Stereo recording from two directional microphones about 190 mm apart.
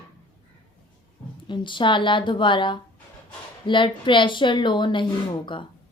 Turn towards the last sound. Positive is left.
turn(degrees=25)  # may be behind; listen again after turning